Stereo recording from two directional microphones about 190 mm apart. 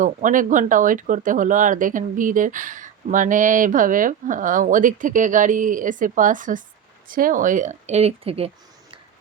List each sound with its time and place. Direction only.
0.0 s speech: 45° right (ahead or behind)